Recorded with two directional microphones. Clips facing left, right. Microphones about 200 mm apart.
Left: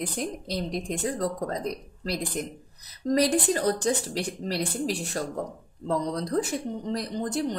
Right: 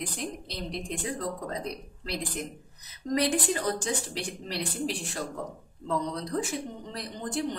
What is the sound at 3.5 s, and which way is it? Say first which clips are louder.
A woman's voice: left 5 dB; 40° left (ahead or behind).